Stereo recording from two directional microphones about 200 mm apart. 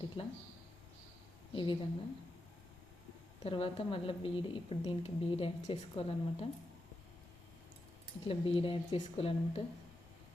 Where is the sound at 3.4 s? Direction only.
25° left (ahead or behind).